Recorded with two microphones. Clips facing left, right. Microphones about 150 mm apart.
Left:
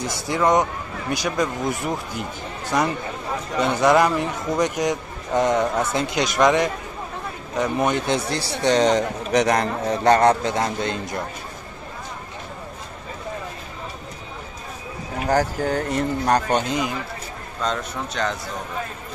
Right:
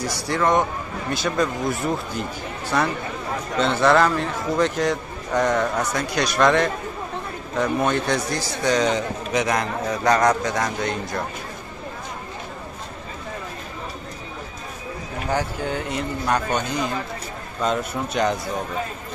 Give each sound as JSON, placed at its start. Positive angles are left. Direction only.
{"t": 0.3, "sound": "a man's voice", "side_deg": 15}
{"t": 15.2, "sound": "speech", "side_deg": 40}
{"t": 16.6, "sound": "speech", "side_deg": 20}
{"t": 17.6, "sound": "speech", "side_deg": -10}